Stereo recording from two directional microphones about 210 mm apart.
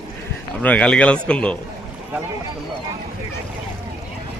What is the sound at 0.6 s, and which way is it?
Speech, 5° left (ahead or behind).